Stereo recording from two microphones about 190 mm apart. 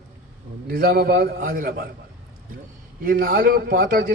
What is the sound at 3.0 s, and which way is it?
A man's voice, 50° right (ahead or behind).